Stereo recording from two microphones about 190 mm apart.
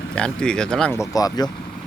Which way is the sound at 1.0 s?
20° left (ahead or behind).